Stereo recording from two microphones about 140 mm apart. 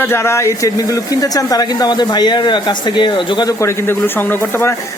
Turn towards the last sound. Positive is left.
turn(degrees=20)  # may be behind; listen again after turning